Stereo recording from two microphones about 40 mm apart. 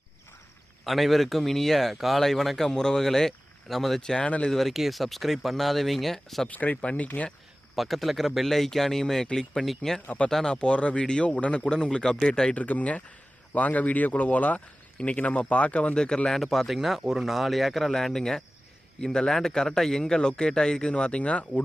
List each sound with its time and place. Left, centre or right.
0.9 s speech: centre
2.7 s speech: centre
4.0 s speech: centre
4.7 s speech: centre
6.5 s speech: left
7.8 s a man's voice: centre
10.5 s speech: left
11.6 s speech: centre
12.5 s speech: left
16.0 s speech: centre
16.4 s a man's voice: centre; by 21.4 s left